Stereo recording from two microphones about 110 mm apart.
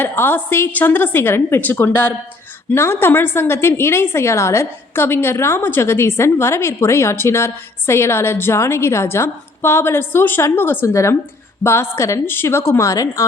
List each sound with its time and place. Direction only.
0.0 s a woman's voice: 20° left (ahead or behind)